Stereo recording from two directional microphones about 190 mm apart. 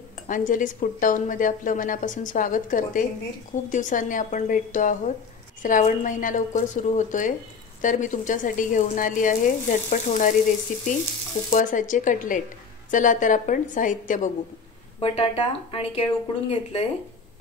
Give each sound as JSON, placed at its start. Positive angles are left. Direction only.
{"t": 0.3, "sound": "a woman's voice", "side_deg": 45}
{"t": 15.0, "sound": "speech", "side_deg": 30}